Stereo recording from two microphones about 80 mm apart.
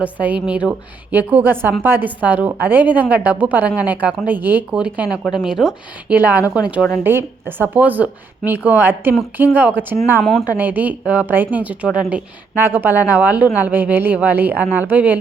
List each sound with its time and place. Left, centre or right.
0.2 s a woman's voice: centre
6.1 s a woman's voice: right
7.0 s speech: right
12.5 s speech: right